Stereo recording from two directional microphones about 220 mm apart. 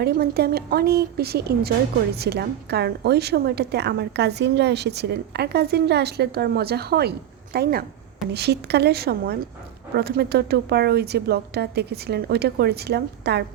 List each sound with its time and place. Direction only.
0.0 s a woman's voice: 45° right (ahead or behind)